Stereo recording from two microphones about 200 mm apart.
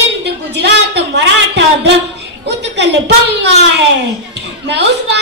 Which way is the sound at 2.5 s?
60° right (ahead or behind).